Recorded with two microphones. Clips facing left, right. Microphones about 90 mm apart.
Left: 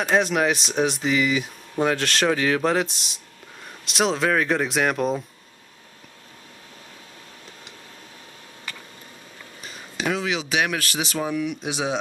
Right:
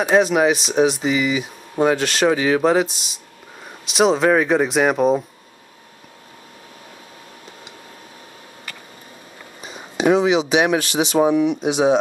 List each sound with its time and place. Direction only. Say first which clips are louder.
0.0 s speech: right 5 dB; 5° right (ahead or behind)
10.5 s speech: right 7 dB; 25° right (ahead or behind)